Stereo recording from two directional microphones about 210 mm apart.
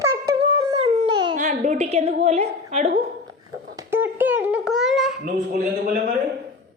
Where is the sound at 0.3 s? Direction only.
25° right (ahead or behind).